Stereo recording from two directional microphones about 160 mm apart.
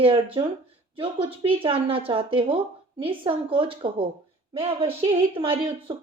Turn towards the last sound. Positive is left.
turn(degrees=-35)  # may be behind; listen again after turning